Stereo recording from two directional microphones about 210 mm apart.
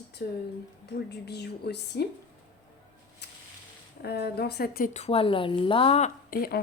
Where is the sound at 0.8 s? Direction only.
55° left (ahead or behind).